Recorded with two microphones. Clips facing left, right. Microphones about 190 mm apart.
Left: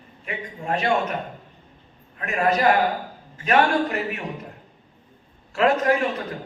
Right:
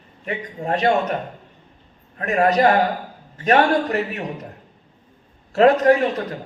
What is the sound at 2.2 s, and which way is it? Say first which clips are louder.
A man's voice: right 5 dB; 40° right (ahead or behind).